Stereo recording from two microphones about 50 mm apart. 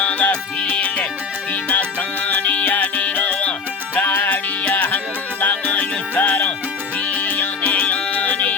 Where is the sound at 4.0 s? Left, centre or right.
Left.